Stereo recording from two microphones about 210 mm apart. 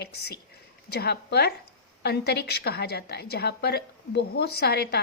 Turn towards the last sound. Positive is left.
turn(degrees=50)  # may be behind; listen again after turning